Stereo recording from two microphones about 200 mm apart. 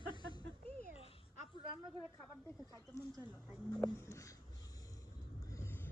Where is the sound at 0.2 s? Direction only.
20° left (ahead or behind).